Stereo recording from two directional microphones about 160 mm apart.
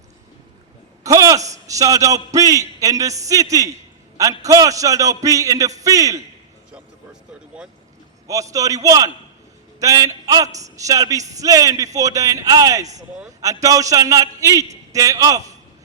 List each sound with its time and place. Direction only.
1.0 s a man's voice: 20° right (ahead or behind)
8.3 s a man's voice: 20° right (ahead or behind)